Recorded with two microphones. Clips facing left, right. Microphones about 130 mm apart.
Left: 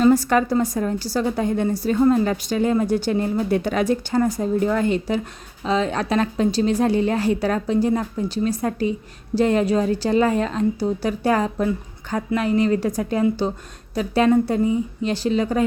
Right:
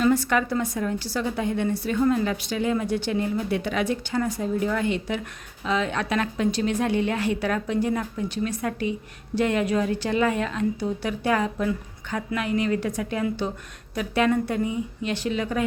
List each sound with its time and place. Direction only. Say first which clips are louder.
0.0 s a woman's voice: left 5 dB; 40° left (ahead or behind)